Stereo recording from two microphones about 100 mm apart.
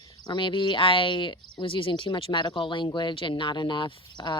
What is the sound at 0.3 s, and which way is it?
Speech, 50° left (ahead or behind).